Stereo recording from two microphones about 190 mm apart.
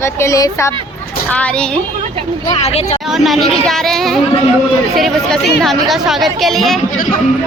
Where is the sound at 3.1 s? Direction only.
Centre (ahead or behind).